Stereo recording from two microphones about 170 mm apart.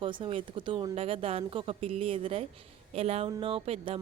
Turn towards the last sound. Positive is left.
turn(degrees=-35)  # may be behind; listen again after turning